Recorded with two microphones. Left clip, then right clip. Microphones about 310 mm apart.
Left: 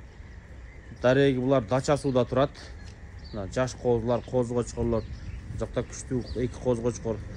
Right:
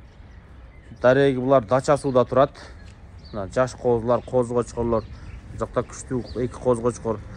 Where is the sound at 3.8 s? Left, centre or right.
Right.